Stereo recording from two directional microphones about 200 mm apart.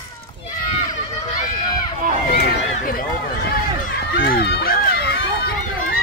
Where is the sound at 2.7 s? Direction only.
45° left (ahead or behind).